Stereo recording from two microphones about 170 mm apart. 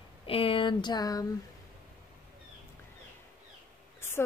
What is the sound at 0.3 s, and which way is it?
Speech, 35° left (ahead or behind).